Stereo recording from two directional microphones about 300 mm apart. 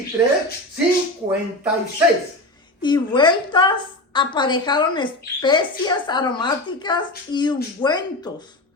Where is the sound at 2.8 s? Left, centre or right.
Centre.